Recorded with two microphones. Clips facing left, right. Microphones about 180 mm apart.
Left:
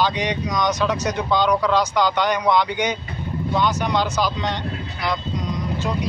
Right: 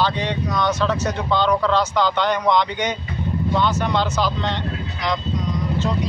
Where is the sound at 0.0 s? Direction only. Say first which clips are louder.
Even; 15° left (ahead or behind).